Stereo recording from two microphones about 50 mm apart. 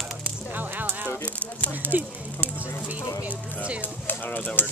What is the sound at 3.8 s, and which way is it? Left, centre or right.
Speech, left.